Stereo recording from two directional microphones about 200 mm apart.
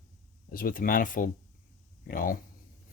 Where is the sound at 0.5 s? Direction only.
45° left (ahead or behind).